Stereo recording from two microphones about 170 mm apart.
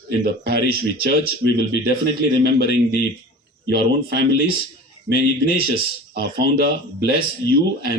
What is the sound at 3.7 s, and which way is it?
Speech, 70° right (ahead or behind).